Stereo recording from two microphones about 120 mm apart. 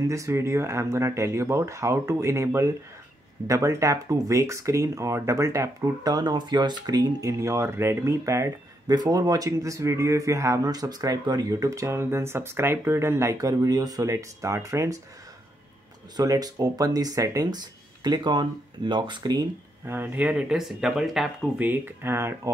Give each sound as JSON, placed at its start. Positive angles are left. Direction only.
{"t": 0.1, "sound": "speech", "side_deg": -25}
{"t": 16.2, "sound": "speech", "side_deg": -30}
{"t": 19.9, "sound": "speech", "side_deg": -15}
{"t": 21.5, "sound": "speech", "side_deg": -15}